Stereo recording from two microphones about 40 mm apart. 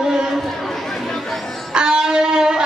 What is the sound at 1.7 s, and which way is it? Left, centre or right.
Music, centre.